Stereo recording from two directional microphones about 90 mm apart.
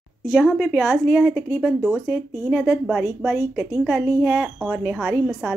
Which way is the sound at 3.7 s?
15° right (ahead or behind).